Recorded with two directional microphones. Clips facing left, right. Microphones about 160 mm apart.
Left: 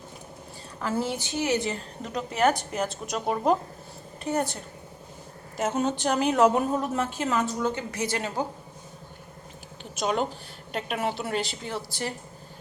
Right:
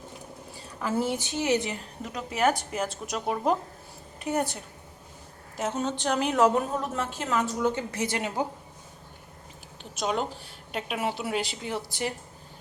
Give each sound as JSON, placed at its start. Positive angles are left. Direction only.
{"t": 0.8, "sound": "a woman's voice", "side_deg": -15}
{"t": 2.0, "sound": "a woman's voice", "side_deg": -5}
{"t": 4.2, "sound": "a woman's voice", "side_deg": -15}
{"t": 5.5, "sound": "a woman's voice", "side_deg": 5}
{"t": 7.9, "sound": "speech", "side_deg": -25}
{"t": 9.9, "sound": "a woman's voice", "side_deg": 0}